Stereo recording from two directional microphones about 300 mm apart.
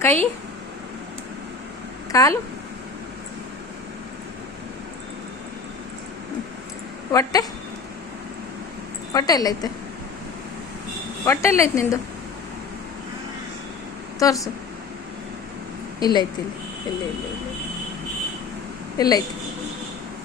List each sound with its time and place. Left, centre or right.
0.0 s a woman's voice: centre
2.1 s a woman's voice: centre
7.1 s a woman's voice: centre
9.1 s a woman's voice: centre
11.3 s a woman's voice: centre
14.2 s a woman's voice: centre
16.0 s a woman's voice: centre
18.9 s a woman's voice: centre